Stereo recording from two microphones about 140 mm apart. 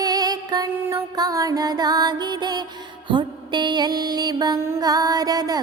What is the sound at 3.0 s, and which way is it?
Music, 35° right (ahead or behind).